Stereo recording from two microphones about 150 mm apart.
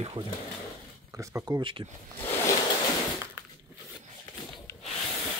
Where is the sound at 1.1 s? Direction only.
20° right (ahead or behind).